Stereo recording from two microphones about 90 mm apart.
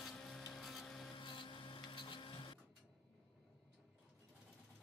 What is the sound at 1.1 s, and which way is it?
Printer, 65° left (ahead or behind).